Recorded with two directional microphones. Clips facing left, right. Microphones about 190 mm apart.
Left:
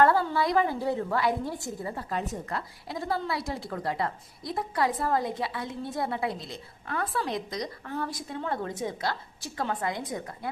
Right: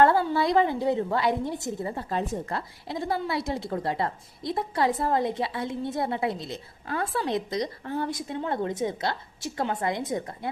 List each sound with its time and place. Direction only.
0.0 s a woman's voice: 25° right (ahead or behind)